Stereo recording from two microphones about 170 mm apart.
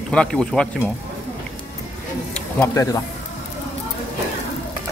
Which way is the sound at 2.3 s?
5° left (ahead or behind).